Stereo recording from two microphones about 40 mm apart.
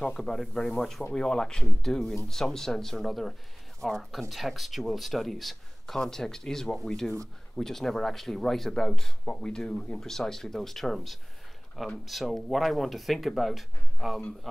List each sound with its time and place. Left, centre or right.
0.2 s speech: centre
7.5 s speech: centre
9.2 s speech: centre